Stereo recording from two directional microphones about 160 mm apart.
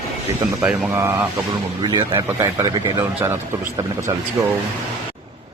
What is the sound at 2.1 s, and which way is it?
A man's voice, 15° right (ahead or behind).